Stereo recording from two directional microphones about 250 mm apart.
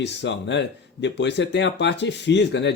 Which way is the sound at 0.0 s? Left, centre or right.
Left.